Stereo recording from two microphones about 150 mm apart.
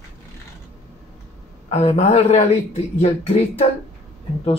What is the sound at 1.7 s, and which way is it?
A man's voice, 45° left (ahead or behind).